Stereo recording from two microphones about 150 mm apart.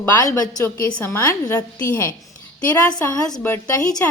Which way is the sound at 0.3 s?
25° left (ahead or behind).